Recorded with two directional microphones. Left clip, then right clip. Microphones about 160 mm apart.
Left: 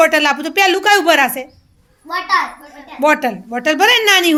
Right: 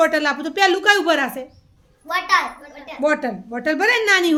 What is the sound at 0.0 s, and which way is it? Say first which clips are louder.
A woman's voice: left 5 dB; 15° left (ahead or behind).